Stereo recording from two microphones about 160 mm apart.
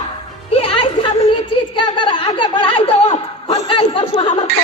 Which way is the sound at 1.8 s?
30° left (ahead or behind).